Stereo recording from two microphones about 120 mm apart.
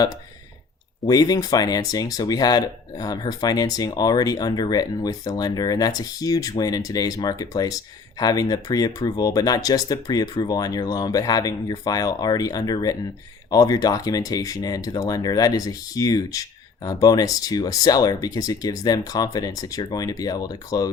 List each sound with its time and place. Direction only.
1.0 s speech: 30° left (ahead or behind)